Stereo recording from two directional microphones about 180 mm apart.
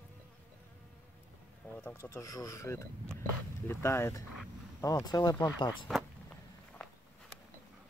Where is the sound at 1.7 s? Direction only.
10° left (ahead or behind).